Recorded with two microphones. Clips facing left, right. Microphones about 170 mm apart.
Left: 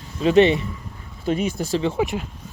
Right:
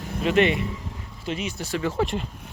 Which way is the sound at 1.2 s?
45° left (ahead or behind).